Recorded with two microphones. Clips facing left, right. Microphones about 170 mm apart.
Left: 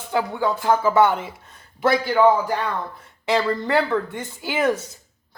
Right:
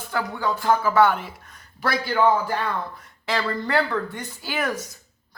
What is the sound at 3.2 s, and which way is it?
Speech, 20° left (ahead or behind).